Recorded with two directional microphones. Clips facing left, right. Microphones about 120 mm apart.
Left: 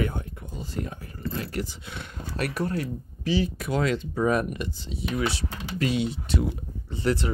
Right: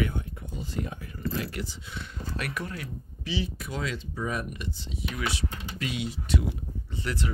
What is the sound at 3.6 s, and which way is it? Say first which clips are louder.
Speech: left 8 dB; 60° left (ahead or behind).